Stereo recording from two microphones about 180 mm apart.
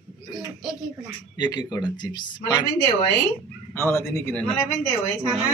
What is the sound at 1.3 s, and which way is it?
Speech, 20° left (ahead or behind).